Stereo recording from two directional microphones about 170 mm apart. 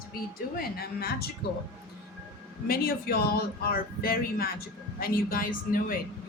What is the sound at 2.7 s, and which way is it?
A woman's voice, 60° left (ahead or behind).